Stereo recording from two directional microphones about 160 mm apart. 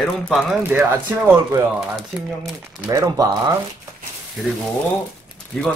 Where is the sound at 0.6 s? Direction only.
10° right (ahead or behind).